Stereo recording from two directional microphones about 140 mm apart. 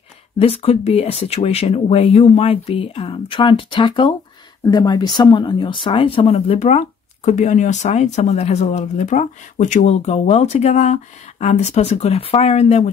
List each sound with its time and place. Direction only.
0.4 s speech: 45° left (ahead or behind)